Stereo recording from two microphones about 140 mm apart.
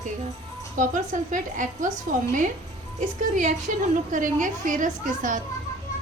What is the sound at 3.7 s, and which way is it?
A woman's voice, 70° right (ahead or behind).